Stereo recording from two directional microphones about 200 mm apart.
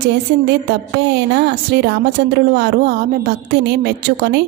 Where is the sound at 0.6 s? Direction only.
55° right (ahead or behind).